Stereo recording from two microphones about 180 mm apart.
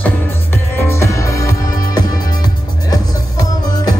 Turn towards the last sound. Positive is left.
turn(degrees=20)  # may be behind; listen again after turning